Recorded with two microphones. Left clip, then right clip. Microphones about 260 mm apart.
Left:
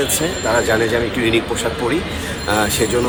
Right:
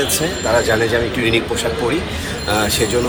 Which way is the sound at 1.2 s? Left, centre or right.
Centre.